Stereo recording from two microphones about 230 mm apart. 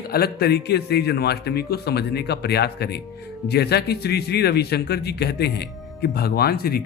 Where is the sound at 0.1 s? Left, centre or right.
Left.